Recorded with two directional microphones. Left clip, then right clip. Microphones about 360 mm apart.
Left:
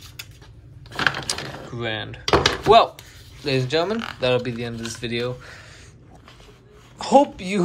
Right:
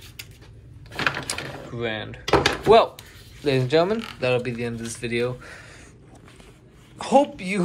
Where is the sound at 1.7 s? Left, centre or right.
Centre.